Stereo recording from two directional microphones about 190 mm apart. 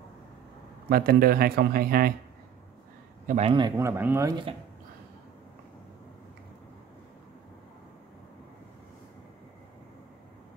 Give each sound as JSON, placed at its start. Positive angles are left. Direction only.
{"t": 0.8, "sound": "a man's voice", "side_deg": -50}
{"t": 3.3, "sound": "speech", "side_deg": -30}